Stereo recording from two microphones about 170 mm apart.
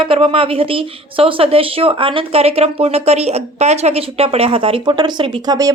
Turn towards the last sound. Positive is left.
turn(degrees=-20)  # may be behind; listen again after turning